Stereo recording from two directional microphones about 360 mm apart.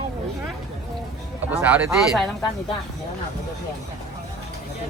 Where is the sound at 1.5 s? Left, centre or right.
Centre.